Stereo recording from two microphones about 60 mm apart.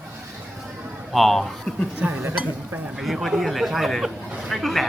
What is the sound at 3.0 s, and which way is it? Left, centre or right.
Speech, centre.